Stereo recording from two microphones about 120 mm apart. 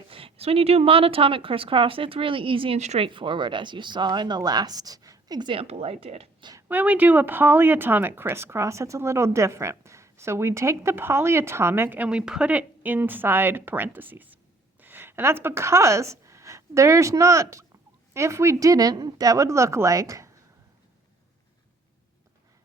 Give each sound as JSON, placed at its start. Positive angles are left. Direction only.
{"t": 0.1, "sound": "speech", "side_deg": -50}
{"t": 2.7, "sound": "speech", "side_deg": -65}
{"t": 3.1, "sound": "speech", "side_deg": -40}
{"t": 5.5, "sound": "speech", "side_deg": -55}
{"t": 6.4, "sound": "a sound", "side_deg": -30}
{"t": 6.7, "sound": "speech", "side_deg": -15}